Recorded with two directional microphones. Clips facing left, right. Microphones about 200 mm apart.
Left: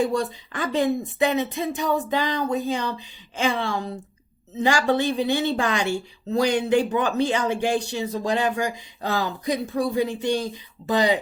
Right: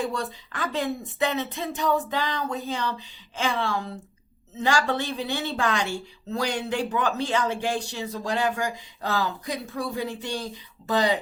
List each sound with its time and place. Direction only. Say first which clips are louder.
0.0 s a woman's voice: left 6 dB; 15° left (ahead or behind)